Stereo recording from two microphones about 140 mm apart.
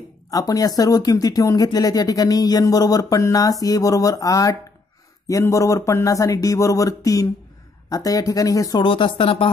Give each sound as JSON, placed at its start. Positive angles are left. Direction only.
{"t": 0.3, "sound": "speech", "side_deg": 25}
{"t": 8.8, "sound": "speech", "side_deg": 40}